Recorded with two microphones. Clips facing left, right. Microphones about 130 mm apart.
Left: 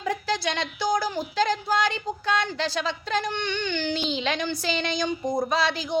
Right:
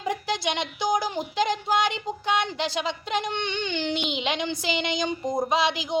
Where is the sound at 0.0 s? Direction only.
20° right (ahead or behind).